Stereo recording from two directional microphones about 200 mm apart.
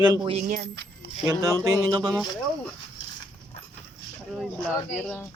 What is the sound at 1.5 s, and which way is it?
Speech, 15° right (ahead or behind).